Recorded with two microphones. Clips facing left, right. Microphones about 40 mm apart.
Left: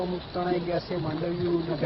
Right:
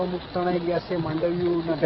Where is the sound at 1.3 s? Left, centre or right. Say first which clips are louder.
Even; centre.